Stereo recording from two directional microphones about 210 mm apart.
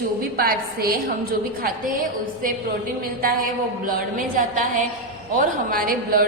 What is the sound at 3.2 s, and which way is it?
A woman's voice, 40° right (ahead or behind).